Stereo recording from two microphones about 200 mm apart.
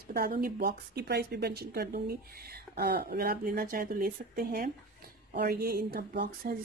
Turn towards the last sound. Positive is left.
turn(degrees=-50)  # may be behind; listen again after turning